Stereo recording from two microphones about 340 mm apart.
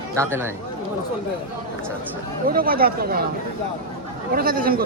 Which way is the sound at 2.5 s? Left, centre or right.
Right.